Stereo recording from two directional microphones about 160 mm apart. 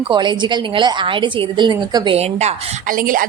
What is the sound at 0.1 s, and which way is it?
A woman's voice, 30° right (ahead or behind).